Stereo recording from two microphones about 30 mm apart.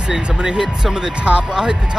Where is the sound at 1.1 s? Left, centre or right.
Right.